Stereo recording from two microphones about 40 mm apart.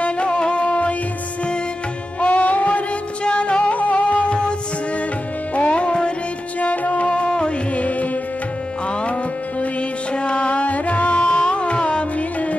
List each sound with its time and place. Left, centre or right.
0.0 s music: left
2.1 s music: left
3.3 s music: left
6.6 s music: left
7.1 s music: left
9.6 s music: left